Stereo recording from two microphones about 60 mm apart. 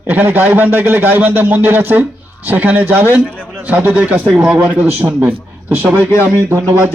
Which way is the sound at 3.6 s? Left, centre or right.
Right.